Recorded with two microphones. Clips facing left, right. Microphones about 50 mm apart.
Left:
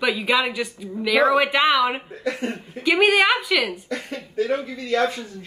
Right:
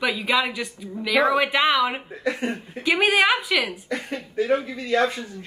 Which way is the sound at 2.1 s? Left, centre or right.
Right.